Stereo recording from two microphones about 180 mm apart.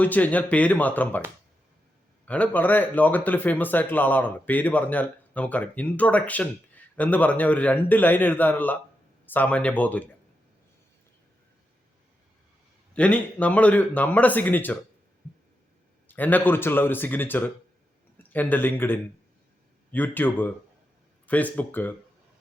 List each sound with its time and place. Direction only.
0.0 s speech: 10° left (ahead or behind)
2.2 s speech: 10° left (ahead or behind)
12.9 s speech: 5° left (ahead or behind)
16.0 s speech: 10° left (ahead or behind)